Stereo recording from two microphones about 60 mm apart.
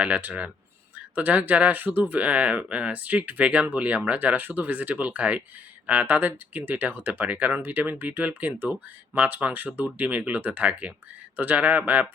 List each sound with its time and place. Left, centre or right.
0.0 s speech: right